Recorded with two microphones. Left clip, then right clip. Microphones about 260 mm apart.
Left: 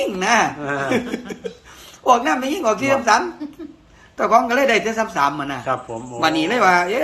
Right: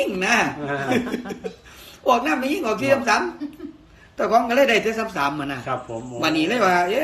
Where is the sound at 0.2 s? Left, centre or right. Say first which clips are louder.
Left 5 dB; centre.